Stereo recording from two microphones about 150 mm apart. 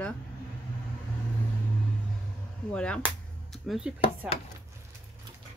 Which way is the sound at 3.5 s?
5° right (ahead or behind).